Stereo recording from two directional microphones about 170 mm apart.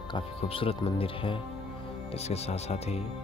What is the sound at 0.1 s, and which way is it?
Speech, 30° left (ahead or behind).